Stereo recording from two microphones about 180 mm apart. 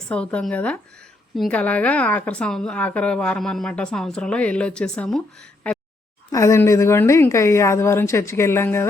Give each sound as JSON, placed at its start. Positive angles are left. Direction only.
{"t": 0.1, "sound": "a woman's voice", "side_deg": 5}
{"t": 6.3, "sound": "a woman's voice", "side_deg": 15}